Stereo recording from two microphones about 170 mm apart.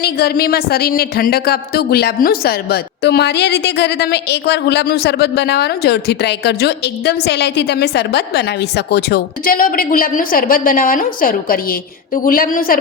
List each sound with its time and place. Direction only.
0.0 s speech: 65° left (ahead or behind)